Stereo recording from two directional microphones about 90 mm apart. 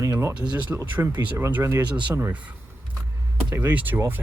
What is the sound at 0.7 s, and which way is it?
Speech, 15° right (ahead or behind).